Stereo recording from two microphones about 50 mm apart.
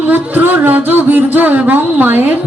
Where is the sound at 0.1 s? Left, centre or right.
Right.